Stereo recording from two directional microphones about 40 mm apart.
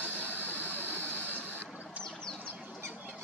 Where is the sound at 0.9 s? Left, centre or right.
Right.